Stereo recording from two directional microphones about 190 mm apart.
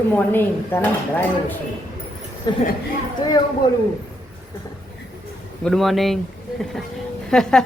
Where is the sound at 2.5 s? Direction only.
25° left (ahead or behind).